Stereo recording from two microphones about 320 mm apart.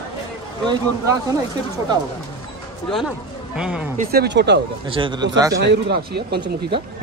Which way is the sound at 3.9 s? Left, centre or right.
Right.